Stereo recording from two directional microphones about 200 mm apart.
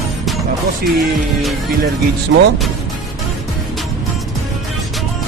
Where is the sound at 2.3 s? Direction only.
60° right (ahead or behind).